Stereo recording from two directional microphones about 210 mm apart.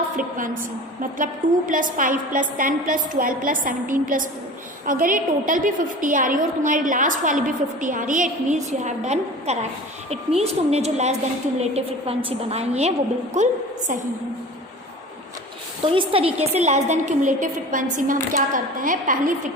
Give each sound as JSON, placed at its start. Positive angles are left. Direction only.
{"t": 0.2, "sound": "a woman's voice", "side_deg": -40}
{"t": 15.9, "sound": "a woman's voice", "side_deg": -25}